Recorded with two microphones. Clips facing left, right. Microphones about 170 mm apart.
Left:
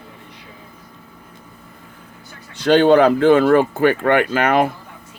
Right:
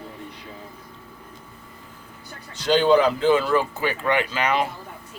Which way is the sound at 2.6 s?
60° left (ahead or behind).